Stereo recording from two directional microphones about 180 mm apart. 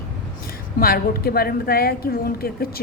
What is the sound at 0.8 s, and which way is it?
A woman's voice, 55° left (ahead or behind).